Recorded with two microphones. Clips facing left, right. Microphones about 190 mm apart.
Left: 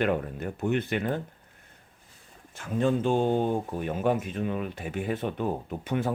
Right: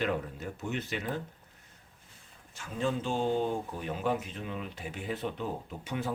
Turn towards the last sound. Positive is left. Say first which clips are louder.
# left 6 dB
turn(degrees=55)  # may be behind; listen again after turning